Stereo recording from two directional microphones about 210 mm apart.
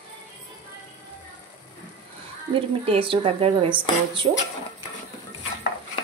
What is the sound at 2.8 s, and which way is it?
A woman's voice, 25° right (ahead or behind).